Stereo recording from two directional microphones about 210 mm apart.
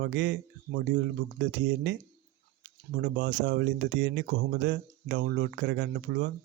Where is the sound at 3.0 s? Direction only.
55° right (ahead or behind).